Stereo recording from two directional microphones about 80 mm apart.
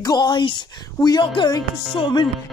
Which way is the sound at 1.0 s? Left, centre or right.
Left.